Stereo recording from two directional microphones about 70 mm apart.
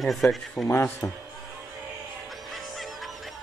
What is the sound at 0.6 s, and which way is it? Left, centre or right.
Speech, left.